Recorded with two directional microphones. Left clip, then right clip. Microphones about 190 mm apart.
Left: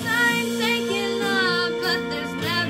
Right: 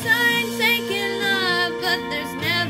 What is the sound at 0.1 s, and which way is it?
Music, 20° left (ahead or behind).